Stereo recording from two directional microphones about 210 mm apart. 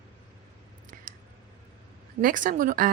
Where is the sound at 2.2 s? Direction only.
40° right (ahead or behind).